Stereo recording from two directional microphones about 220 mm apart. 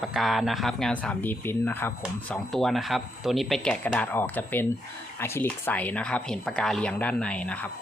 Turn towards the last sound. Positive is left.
turn(degrees=5)  # may be behind; listen again after turning